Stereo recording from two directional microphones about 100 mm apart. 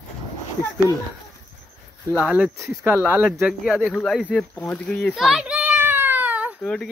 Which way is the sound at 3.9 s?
5° left (ahead or behind).